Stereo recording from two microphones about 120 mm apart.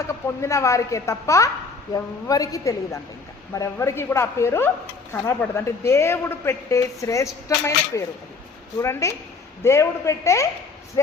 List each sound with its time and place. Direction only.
0.1 s a woman's voice: 25° left (ahead or behind)